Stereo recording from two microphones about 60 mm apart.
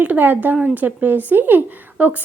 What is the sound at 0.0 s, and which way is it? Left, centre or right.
Speech, right.